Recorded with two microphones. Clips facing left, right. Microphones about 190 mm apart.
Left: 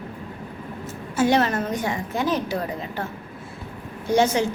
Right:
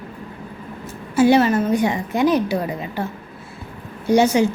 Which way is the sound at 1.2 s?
5° right (ahead or behind).